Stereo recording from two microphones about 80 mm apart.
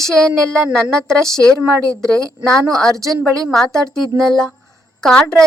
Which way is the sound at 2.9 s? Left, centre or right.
Right.